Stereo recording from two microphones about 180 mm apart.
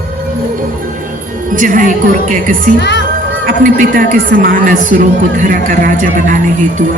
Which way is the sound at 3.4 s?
50° right (ahead or behind).